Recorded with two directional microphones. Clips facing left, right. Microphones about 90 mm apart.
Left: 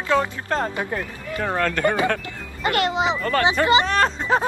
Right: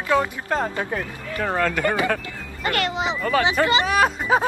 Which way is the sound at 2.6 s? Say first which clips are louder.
Left 3 dB; 20° left (ahead or behind).